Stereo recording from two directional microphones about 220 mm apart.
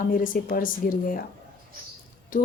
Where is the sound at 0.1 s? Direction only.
40° left (ahead or behind).